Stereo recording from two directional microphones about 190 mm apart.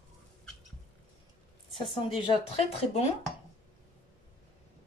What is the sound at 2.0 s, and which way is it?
Speech, 30° left (ahead or behind).